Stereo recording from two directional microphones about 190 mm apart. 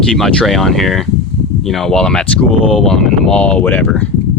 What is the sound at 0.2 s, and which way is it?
Speech, centre (ahead or behind).